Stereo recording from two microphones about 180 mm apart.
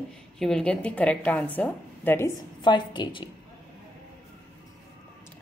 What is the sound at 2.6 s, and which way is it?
Speech, 25° left (ahead or behind).